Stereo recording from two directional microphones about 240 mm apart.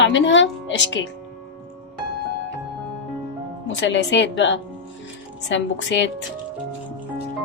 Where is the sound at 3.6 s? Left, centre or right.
Left.